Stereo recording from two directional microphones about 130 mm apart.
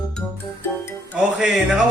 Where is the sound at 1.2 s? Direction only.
5° right (ahead or behind).